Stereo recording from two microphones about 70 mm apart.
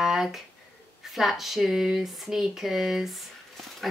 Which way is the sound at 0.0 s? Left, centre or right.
Centre.